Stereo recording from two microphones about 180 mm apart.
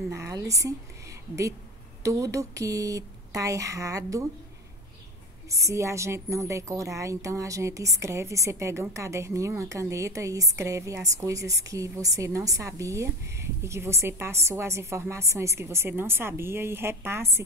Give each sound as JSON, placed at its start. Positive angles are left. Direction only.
{"t": 0.1, "sound": "a woman's voice", "side_deg": -15}
{"t": 2.0, "sound": "a woman's voice", "side_deg": -20}
{"t": 5.5, "sound": "a woman's voice", "side_deg": -15}